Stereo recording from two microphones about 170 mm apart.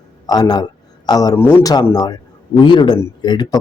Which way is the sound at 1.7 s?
25° left (ahead or behind).